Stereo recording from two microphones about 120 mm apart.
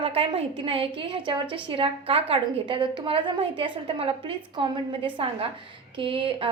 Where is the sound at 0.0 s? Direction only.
55° right (ahead or behind).